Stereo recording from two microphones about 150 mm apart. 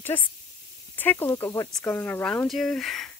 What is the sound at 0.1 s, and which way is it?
Speech, 15° left (ahead or behind).